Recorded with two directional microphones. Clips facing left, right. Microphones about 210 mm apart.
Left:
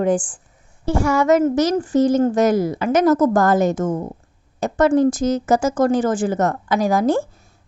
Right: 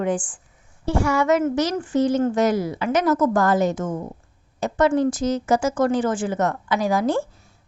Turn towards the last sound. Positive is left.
turn(degrees=45)  # may be behind; listen again after turning